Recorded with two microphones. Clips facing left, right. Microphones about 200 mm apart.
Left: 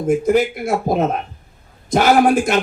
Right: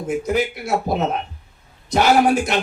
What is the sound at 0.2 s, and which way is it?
A man's voice, 50° left (ahead or behind).